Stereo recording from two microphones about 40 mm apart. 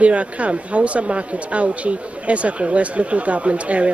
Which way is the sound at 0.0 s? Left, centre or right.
Right.